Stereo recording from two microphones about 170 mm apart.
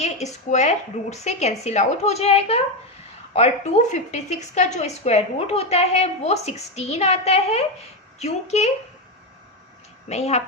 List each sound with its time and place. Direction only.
0.5 s a woman's voice: 40° left (ahead or behind)
10.1 s a woman's voice: 40° left (ahead or behind)